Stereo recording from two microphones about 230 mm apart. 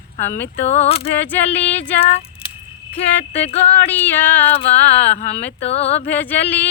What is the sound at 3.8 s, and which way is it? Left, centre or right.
Speech, centre.